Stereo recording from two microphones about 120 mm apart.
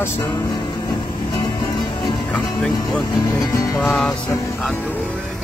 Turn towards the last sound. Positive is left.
turn(degrees=5)  # may be behind; listen again after turning